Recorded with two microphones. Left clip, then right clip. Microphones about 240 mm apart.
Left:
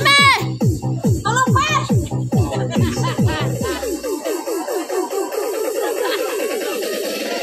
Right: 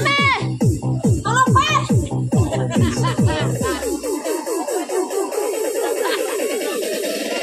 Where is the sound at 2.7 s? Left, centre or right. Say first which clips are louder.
Even; centre.